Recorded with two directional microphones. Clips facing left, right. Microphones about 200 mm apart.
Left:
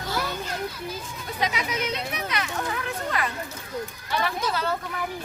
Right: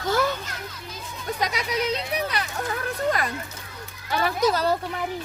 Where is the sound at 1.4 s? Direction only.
40° right (ahead or behind).